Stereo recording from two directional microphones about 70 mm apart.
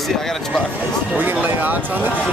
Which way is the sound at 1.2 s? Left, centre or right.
Right.